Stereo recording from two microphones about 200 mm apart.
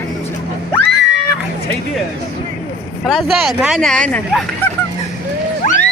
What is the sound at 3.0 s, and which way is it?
Speech, centre (ahead or behind).